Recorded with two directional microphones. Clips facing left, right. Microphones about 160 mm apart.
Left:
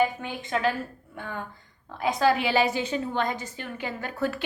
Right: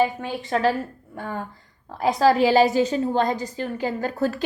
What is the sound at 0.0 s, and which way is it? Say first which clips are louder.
A woman's voice: right 3 dB; 35° right (ahead or behind).